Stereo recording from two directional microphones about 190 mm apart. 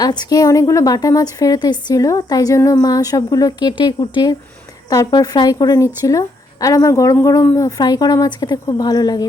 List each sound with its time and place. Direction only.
0.0 s a woman's voice: 20° left (ahead or behind)